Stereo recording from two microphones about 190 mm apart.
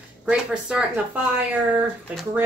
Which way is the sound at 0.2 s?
5° right (ahead or behind).